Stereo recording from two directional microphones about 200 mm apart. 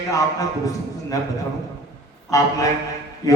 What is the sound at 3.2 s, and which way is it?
Mantra, 15° left (ahead or behind).